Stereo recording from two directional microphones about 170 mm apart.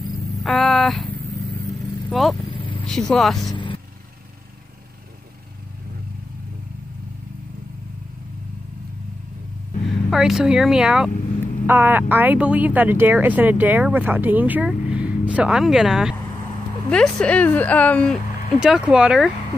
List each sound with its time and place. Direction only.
0.4 s a sound: centre (ahead or behind)
2.0 s speech: centre (ahead or behind)
2.5 s vehicle: 30° left (ahead or behind)
2.9 s speech: 5° left (ahead or behind)
3.5 s vehicle: 30° left (ahead or behind)
10.0 s a woman's voice: centre (ahead or behind)
18.6 s speech: 5° right (ahead or behind)